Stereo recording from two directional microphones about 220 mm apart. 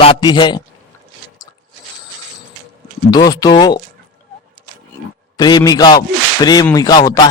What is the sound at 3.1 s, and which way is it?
Speech, 15° left (ahead or behind).